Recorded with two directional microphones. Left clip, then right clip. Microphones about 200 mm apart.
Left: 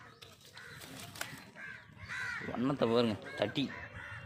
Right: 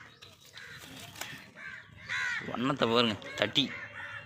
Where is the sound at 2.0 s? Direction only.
50° left (ahead or behind).